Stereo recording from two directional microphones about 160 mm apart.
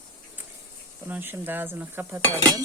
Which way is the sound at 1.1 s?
15° right (ahead or behind).